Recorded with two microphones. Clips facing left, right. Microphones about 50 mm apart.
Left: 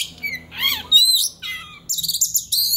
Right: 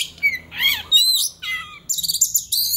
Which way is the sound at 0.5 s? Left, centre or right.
Centre.